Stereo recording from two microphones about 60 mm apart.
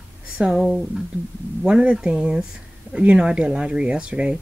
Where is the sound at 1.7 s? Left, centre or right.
Centre.